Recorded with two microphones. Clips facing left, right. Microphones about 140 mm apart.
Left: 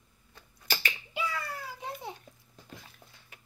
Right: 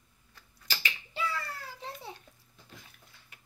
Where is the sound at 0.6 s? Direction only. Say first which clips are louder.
Left 3 dB; 55° left (ahead or behind).